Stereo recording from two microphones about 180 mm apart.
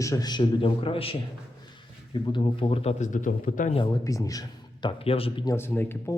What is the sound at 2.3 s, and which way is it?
Speech, 35° left (ahead or behind).